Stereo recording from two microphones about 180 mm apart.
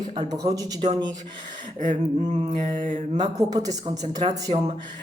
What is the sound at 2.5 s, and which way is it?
Mantra, 40° right (ahead or behind).